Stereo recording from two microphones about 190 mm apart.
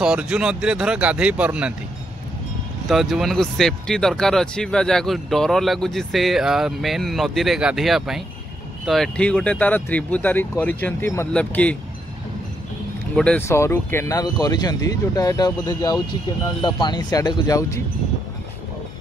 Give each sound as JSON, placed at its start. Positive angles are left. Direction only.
{"t": 0.0, "sound": "speech", "side_deg": -5}
{"t": 2.9, "sound": "speech", "side_deg": 0}
{"t": 13.1, "sound": "speech", "side_deg": 5}